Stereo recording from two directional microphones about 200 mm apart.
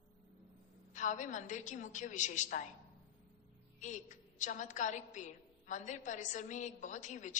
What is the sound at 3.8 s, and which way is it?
A woman's voice, 40° left (ahead or behind).